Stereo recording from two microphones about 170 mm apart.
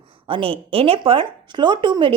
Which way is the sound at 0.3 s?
30° right (ahead or behind).